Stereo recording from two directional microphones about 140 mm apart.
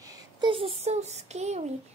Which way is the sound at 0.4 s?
40° right (ahead or behind).